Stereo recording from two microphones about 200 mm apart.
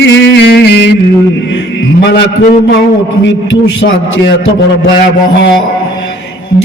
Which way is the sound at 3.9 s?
65° left (ahead or behind).